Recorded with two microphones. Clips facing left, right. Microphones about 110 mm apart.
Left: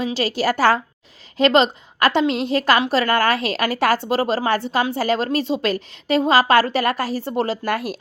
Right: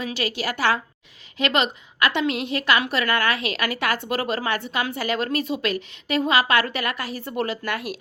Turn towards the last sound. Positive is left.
turn(degrees=35)  # may be behind; listen again after turning